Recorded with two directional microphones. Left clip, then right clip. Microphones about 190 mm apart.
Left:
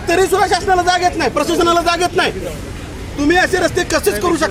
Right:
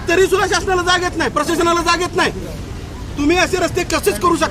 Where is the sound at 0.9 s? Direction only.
30° right (ahead or behind).